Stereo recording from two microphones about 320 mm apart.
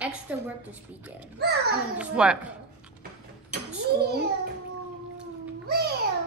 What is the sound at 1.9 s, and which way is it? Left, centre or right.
Speech, centre.